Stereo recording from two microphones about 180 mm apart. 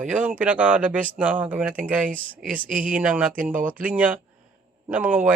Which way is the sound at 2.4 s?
10° right (ahead or behind).